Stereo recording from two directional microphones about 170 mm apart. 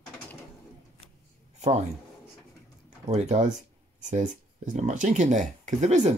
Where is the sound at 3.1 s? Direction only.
40° right (ahead or behind).